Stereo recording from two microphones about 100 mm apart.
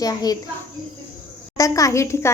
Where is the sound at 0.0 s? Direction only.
40° left (ahead or behind).